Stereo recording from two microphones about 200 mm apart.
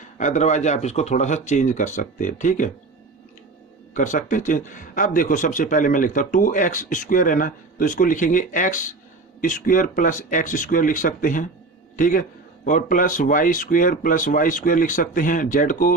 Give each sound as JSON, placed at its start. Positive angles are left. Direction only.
{"t": 0.2, "sound": "speech", "side_deg": 35}
{"t": 3.9, "sound": "speech", "side_deg": 40}